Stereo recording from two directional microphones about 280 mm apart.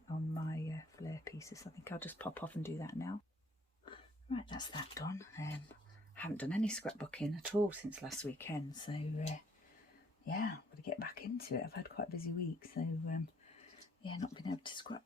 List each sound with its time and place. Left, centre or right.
0.4 s speech: centre